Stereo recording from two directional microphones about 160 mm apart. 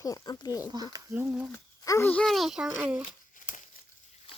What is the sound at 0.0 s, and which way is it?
Speech, 25° left (ahead or behind).